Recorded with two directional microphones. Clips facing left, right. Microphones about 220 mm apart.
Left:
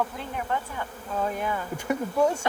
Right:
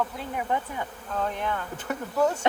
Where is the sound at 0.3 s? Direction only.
15° right (ahead or behind).